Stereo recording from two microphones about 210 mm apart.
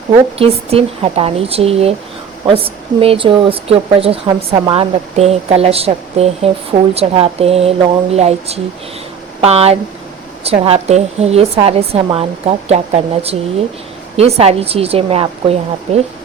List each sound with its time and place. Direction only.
0.3 s speech: 30° right (ahead or behind)